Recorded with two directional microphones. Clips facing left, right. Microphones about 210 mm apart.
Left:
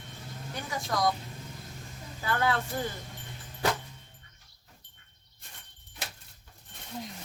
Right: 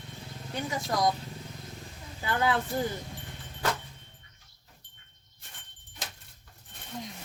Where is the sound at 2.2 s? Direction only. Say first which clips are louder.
Right 1 dB; 20° right (ahead or behind).